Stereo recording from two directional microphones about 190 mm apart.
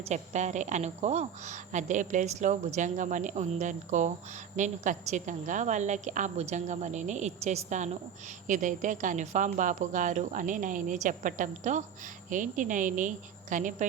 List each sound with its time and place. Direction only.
0.1 s a woman's voice: 35° right (ahead or behind)